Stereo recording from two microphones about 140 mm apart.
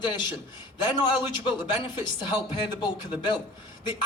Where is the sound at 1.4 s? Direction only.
35° left (ahead or behind).